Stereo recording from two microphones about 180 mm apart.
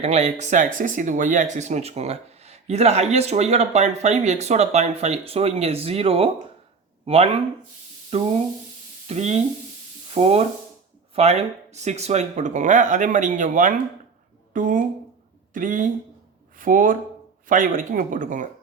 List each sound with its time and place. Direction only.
0.0 s speech: 35° right (ahead or behind)